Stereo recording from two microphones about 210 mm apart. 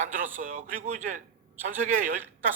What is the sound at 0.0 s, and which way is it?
Speech, 40° right (ahead or behind).